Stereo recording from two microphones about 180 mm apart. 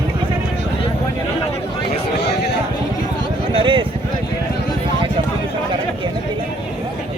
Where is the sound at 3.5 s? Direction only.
30° right (ahead or behind).